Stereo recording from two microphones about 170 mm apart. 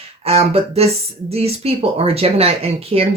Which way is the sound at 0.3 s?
35° right (ahead or behind).